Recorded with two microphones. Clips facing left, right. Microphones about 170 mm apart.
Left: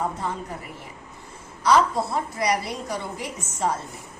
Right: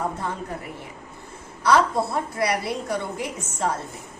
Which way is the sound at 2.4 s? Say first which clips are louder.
Right 1 dB; 60° right (ahead or behind).